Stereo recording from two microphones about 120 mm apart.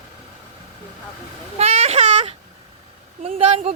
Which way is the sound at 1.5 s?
60° right (ahead or behind).